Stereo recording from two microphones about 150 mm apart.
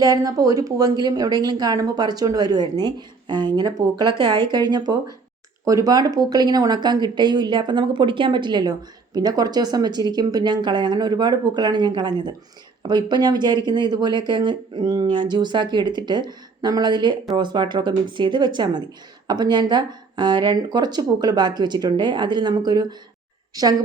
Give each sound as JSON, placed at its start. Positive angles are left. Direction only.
{"t": 0.0, "sound": "speech", "side_deg": -25}